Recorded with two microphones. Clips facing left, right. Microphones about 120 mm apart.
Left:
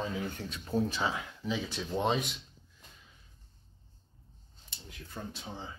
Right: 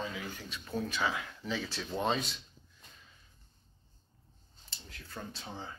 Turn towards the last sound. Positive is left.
turn(degrees=15)  # may be behind; listen again after turning